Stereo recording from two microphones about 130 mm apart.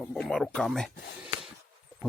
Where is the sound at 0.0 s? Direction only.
5° left (ahead or behind).